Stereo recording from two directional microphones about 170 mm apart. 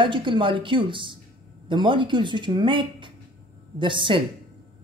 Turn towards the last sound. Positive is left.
turn(degrees=-30)  # may be behind; listen again after turning